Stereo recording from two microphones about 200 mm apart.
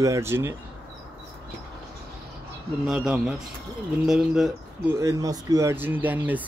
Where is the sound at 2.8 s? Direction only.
Centre (ahead or behind).